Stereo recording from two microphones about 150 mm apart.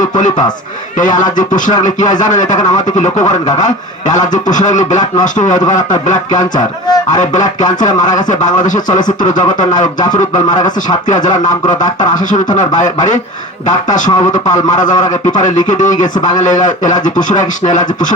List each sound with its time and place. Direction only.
0.2 s a man's voice: 55° left (ahead or behind)